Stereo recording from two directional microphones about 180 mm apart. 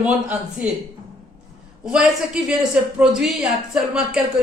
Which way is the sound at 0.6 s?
10° right (ahead or behind).